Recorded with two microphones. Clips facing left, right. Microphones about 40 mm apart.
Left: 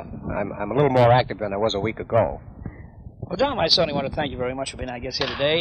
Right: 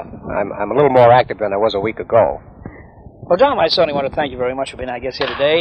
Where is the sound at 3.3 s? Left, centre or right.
Right.